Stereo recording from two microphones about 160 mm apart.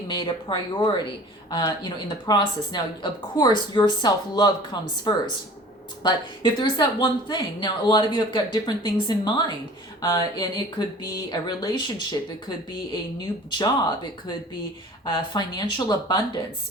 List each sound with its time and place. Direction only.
0.1 s speech: 30° left (ahead or behind)
15.0 s speech: 25° left (ahead or behind)